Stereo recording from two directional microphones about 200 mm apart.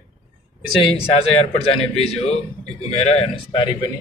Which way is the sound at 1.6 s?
30° left (ahead or behind).